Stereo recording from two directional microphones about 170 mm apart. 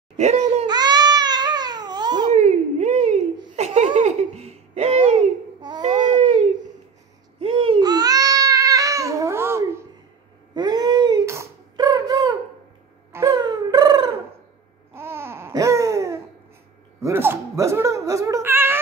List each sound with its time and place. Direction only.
0.2 s a child's voice: 40° right (ahead or behind)
0.7 s babbling: 25° right (ahead or behind)
2.3 s a sound: 40° right (ahead or behind)
3.5 s laughter: 40° right (ahead or behind)
5.8 s baby cry: 45° right (ahead or behind)
7.3 s babbling: 35° right (ahead or behind); by 9.8 s 15° right (ahead or behind)
10.5 s a sound: 25° right (ahead or behind)
15.0 s babbling: 15° right (ahead or behind)
17.0 s a sound: 15° right (ahead or behind)